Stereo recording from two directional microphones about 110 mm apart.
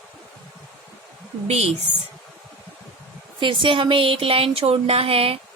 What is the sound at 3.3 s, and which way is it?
Speech, 45° right (ahead or behind).